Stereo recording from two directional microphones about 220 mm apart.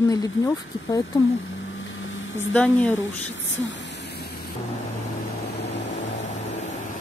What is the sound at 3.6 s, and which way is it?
Spray, 55° left (ahead or behind).